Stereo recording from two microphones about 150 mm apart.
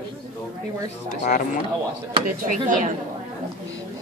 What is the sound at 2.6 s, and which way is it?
Speech, 60° right (ahead or behind).